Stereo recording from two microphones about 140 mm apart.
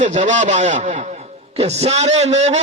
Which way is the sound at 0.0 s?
60° right (ahead or behind).